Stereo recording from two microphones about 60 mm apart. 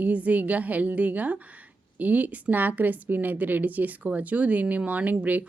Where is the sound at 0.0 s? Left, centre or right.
Right.